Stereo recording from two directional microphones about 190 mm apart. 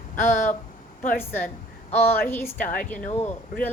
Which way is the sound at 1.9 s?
10° left (ahead or behind).